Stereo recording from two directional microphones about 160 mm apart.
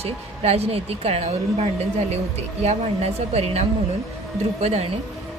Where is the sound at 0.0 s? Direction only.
40° right (ahead or behind).